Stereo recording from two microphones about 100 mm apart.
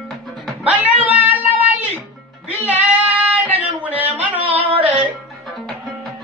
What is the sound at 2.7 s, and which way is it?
Child singing, 15° right (ahead or behind).